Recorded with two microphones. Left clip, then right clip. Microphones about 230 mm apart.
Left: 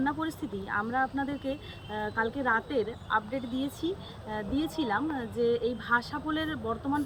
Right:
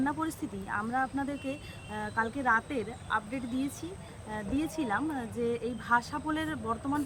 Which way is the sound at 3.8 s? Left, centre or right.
Right.